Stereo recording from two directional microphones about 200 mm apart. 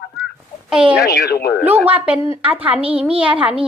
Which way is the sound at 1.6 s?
10° right (ahead or behind).